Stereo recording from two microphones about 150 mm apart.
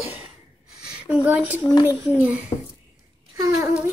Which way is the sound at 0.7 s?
5° right (ahead or behind).